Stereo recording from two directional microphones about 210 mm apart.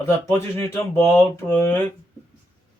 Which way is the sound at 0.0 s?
15° left (ahead or behind).